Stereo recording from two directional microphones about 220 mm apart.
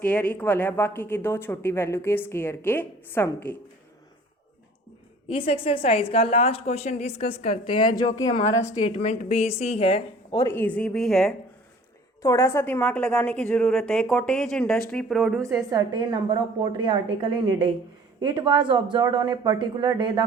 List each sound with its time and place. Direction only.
0.0 s speech: 5° left (ahead or behind)
5.3 s a woman's voice: 25° left (ahead or behind)
8.8 s a woman's voice: 30° left (ahead or behind)
10.3 s a woman's voice: 10° left (ahead or behind)
12.2 s a woman's voice: 15° left (ahead or behind)
15.4 s a woman's voice: 20° right (ahead or behind)